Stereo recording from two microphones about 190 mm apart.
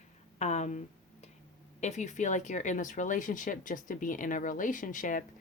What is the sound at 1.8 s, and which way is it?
Speech, 40° left (ahead or behind).